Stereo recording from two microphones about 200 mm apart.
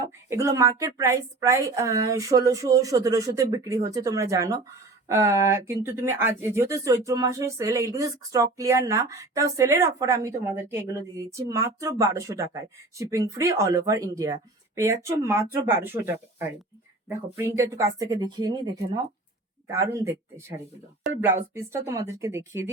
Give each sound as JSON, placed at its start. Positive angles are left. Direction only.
{"t": 0.3, "sound": "a woman's voice", "side_deg": -15}